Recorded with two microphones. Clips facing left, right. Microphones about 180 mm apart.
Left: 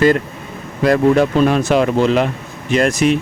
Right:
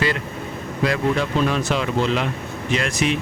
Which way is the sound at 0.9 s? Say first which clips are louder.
Left 9 dB; 50° left (ahead or behind).